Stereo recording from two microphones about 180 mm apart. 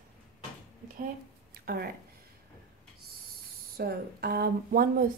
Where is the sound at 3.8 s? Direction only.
60° right (ahead or behind).